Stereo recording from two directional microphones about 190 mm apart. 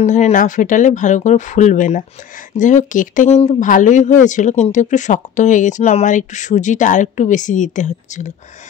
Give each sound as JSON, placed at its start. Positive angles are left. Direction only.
{"t": 0.0, "sound": "speech", "side_deg": 40}